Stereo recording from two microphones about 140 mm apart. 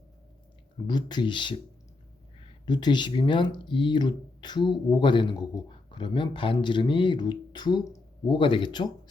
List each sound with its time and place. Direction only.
0.9 s speech: 30° left (ahead or behind)
2.6 s speech: 30° left (ahead or behind)